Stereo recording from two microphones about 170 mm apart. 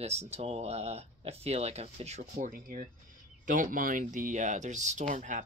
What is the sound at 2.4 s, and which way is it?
Speech, 55° right (ahead or behind).